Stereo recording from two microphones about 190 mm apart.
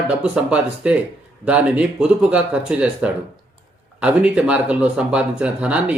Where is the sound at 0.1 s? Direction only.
5° right (ahead or behind).